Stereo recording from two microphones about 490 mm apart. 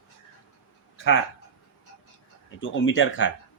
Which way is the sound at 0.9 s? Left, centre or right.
Left.